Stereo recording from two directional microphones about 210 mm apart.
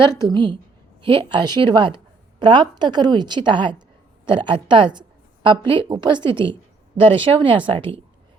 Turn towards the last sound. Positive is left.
turn(degrees=-25)  # may be behind; listen again after turning